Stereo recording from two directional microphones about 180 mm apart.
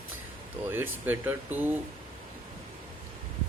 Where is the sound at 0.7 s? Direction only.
10° right (ahead or behind).